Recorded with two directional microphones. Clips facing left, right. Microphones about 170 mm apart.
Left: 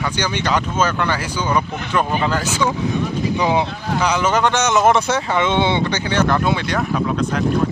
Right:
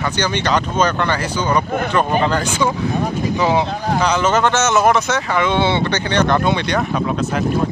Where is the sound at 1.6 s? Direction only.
50° right (ahead or behind).